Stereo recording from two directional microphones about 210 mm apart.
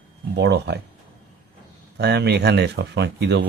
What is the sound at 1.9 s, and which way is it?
Speech, 55° right (ahead or behind).